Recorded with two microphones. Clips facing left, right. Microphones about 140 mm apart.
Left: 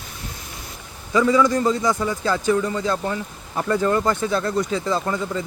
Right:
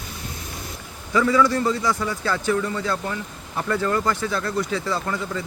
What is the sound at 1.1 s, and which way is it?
Speech, 15° left (ahead or behind).